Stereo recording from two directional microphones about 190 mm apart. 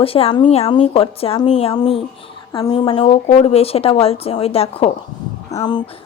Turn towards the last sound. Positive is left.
turn(degrees=20)  # may be behind; listen again after turning